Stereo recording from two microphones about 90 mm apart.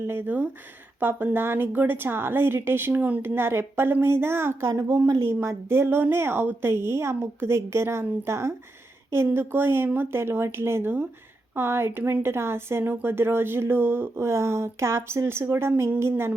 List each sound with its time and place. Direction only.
0.1 s speech: 25° right (ahead or behind)
4.8 s speech: 40° right (ahead or behind)